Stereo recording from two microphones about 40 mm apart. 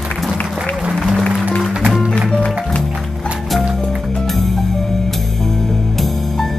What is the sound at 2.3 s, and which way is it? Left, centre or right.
Music, left.